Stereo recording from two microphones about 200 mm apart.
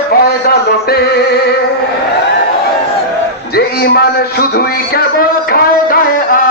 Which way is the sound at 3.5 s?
50° left (ahead or behind).